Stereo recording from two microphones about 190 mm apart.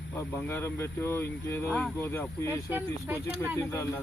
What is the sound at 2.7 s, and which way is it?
Speech, 10° right (ahead or behind).